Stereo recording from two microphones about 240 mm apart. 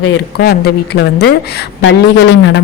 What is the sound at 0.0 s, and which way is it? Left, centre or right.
Speech, left.